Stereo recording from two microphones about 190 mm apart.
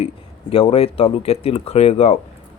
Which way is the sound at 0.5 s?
30° left (ahead or behind).